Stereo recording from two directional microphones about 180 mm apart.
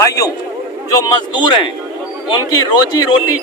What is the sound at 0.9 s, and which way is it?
Speech, 20° left (ahead or behind).